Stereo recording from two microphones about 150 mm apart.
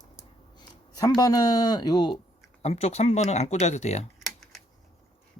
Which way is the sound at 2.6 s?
45° left (ahead or behind).